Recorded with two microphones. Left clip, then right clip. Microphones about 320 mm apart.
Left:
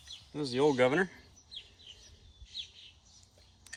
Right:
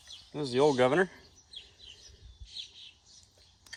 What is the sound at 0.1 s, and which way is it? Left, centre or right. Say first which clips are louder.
Bird: right 3 dB; right.